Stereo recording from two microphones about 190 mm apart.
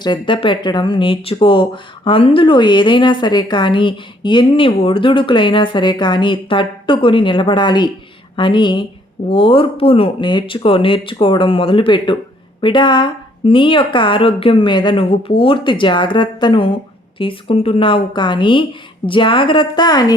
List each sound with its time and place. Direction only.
0.0 s speech: 25° left (ahead or behind)